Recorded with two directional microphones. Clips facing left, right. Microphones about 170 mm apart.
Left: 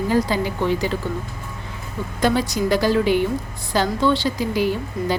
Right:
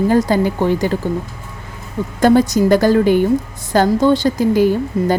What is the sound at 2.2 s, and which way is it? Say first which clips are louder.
Speech: right 8 dB; 50° right (ahead or behind).